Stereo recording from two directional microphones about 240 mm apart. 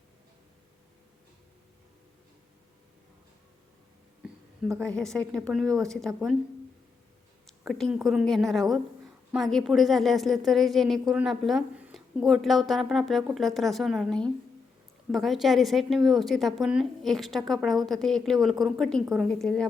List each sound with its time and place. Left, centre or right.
4.6 s speech: centre
7.4 s speech: centre